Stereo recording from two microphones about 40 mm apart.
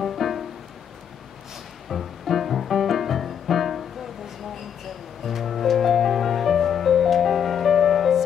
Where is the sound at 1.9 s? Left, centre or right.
Centre.